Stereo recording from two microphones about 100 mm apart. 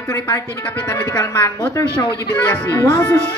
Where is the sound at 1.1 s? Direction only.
30° left (ahead or behind).